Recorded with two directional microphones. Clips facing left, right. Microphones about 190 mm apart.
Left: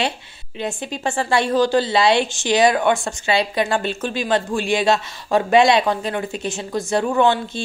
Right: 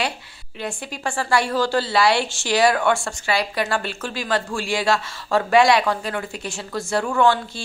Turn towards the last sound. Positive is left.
turn(degrees=20)  # may be behind; listen again after turning